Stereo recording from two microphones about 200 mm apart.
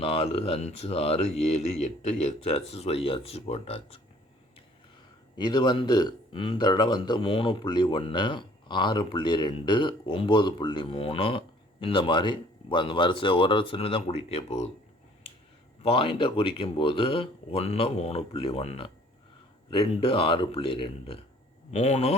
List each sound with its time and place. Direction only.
0.0 s speech: 30° left (ahead or behind)
5.4 s speech: 20° left (ahead or behind)
15.8 s speech: 25° left (ahead or behind)